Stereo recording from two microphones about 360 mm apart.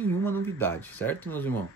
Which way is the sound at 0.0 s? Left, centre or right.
Centre.